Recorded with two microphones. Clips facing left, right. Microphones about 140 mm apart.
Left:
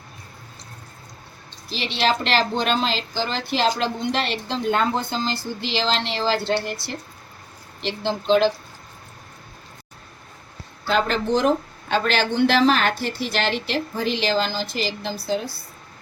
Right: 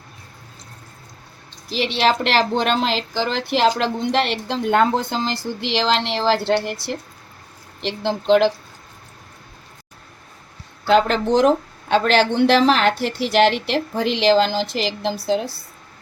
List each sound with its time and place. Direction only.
1.7 s a woman's voice: 75° right (ahead or behind)
10.8 s a woman's voice: 65° right (ahead or behind)